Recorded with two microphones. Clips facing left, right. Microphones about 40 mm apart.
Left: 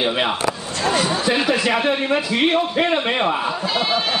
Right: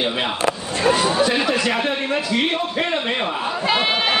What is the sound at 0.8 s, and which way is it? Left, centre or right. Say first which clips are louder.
Speech: right 2 dB; centre.